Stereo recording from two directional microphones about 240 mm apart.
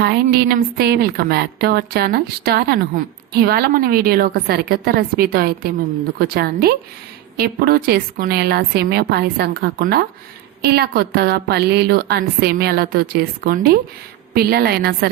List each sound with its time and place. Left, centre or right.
0.0 s a woman's voice: right